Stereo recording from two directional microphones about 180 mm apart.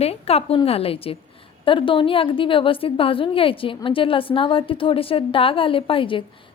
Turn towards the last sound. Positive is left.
turn(degrees=30)  # may be behind; listen again after turning